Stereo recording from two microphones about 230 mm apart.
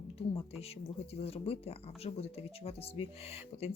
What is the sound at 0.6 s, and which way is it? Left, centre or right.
Speech, left.